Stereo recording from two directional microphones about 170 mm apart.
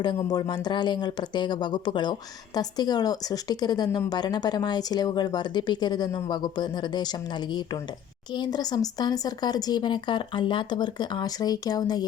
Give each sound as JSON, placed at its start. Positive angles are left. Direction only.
{"t": 0.0, "sound": "speech", "side_deg": 25}
{"t": 8.4, "sound": "speech", "side_deg": 25}